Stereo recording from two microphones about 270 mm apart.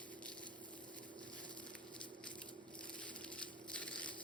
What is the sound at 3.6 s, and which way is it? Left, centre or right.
Crushing, centre.